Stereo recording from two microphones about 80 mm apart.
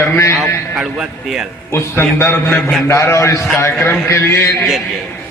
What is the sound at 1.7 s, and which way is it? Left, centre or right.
A man's voice, left.